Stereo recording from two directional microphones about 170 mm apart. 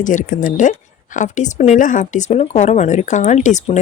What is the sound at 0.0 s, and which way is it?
Speech, 50° left (ahead or behind).